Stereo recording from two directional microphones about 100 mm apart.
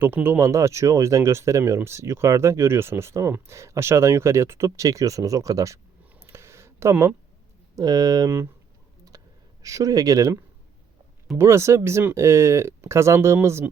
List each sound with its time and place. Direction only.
0.0 s speech: 20° right (ahead or behind)
6.9 s speech: 15° right (ahead or behind)
7.8 s speech: 40° right (ahead or behind)
9.1 s a sound: 40° right (ahead or behind)
9.6 s speech: 35° right (ahead or behind)
11.3 s speech: 25° right (ahead or behind)